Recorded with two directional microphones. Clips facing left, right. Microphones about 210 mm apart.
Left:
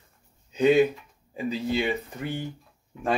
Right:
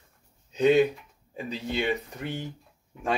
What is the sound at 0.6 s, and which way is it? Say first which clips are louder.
Speech: left 1 dB; 5° left (ahead or behind).